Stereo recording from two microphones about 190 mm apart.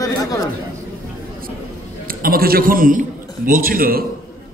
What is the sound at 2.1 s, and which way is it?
A man's voice, 50° right (ahead or behind).